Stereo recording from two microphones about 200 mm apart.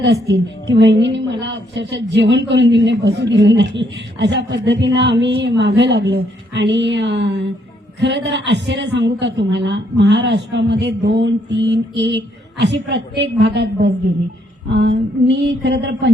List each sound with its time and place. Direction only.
0.0 s a woman's voice: 60° right (ahead or behind)